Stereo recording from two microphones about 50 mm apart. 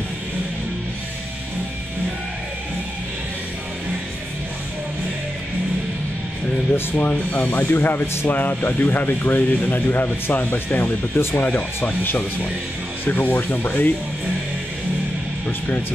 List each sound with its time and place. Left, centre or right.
7.3 s speech: left
8.4 s speech: left
8.6 s speech: left
9.8 s speech: left